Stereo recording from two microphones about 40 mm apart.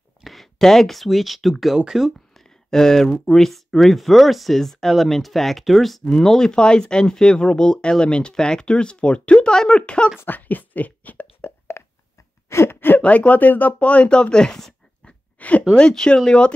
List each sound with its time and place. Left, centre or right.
0.2 s speech: centre
2.3 s speech: centre
6.0 s speech: centre
10.2 s speech: left
11.4 s a sound: left
12.6 s speech: left
13.0 s speech: left; by 14.6 s centre
15.3 s a sound: left
15.7 s speech: centre